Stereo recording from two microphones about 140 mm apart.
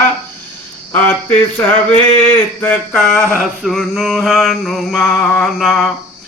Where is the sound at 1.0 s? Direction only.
15° left (ahead or behind).